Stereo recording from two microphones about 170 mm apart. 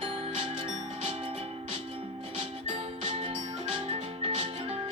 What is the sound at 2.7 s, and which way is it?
Music, 35° right (ahead or behind).